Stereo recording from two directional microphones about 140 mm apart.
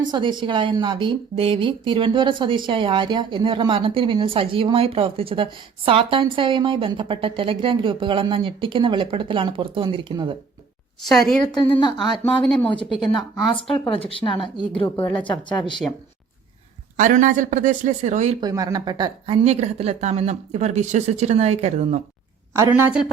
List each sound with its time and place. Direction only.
0.0 s a woman's voice: 30° right (ahead or behind)
11.0 s a woman's voice: centre (ahead or behind)
11.5 s speech: 35° left (ahead or behind)
12.2 s speech: 5° left (ahead or behind)
12.6 s speech: 40° left (ahead or behind)
14.8 s a woman's voice: 25° left (ahead or behind)
15.3 s speech: 35° left (ahead or behind)
17.0 s speech: 65° right (ahead or behind)
18.3 s speech: 25° right (ahead or behind); by 22.0 s 55° right (ahead or behind)
22.5 s a woman's voice: 15° right (ahead or behind)